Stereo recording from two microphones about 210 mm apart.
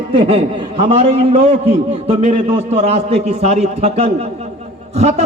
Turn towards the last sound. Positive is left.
turn(degrees=-30)  # may be behind; listen again after turning